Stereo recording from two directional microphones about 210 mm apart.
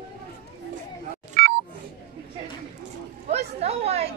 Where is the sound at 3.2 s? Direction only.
30° right (ahead or behind).